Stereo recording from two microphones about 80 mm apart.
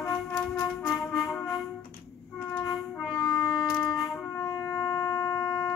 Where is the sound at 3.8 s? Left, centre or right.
Centre.